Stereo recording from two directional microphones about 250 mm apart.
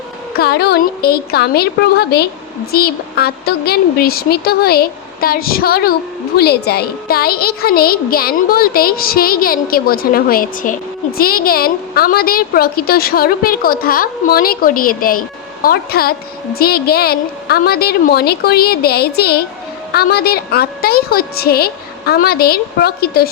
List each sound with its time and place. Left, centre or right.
0.3 s a woman's voice: left